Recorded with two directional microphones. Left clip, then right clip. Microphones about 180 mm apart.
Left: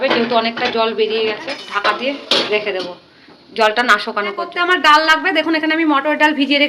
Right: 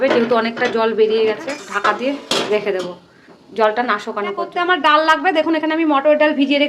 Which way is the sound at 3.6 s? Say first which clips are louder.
Left 3 dB; 20° right (ahead or behind).